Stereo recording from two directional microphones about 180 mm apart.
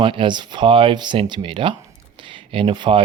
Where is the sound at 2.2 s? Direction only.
30° right (ahead or behind).